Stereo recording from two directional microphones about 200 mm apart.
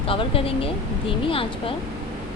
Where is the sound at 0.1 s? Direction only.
25° left (ahead or behind).